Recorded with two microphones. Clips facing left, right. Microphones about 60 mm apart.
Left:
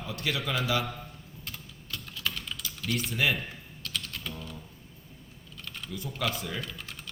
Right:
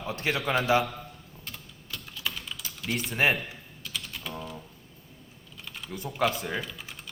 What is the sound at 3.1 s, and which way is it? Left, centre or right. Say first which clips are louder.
Speech: right 4 dB; right.